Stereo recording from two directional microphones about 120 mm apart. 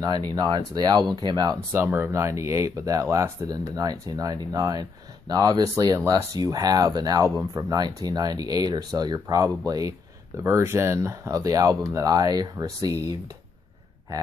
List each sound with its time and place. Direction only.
0.0 s speech: 35° right (ahead or behind)
1.7 s speech: 25° right (ahead or behind)